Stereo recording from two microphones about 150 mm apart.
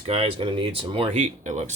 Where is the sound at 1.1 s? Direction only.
55° right (ahead or behind).